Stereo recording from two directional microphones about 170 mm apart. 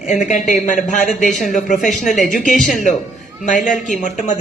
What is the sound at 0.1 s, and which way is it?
Speech, 45° left (ahead or behind).